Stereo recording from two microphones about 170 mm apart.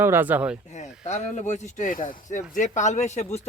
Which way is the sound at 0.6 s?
45° left (ahead or behind).